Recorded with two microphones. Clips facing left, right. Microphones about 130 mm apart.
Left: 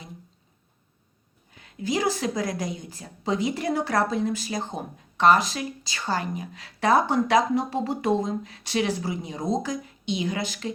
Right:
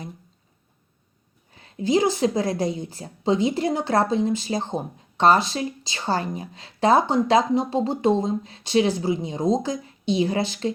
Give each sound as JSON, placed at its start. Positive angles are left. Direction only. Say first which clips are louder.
{"t": 1.5, "sound": "a woman's voice", "louder": "right 6 dB", "side_deg": -30}